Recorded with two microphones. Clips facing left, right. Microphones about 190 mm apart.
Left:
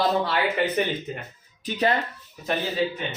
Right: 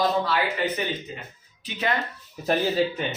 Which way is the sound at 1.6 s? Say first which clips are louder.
Left 5 dB; 40° left (ahead or behind).